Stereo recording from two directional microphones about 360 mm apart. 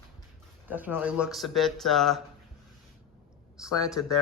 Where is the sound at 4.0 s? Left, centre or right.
Left.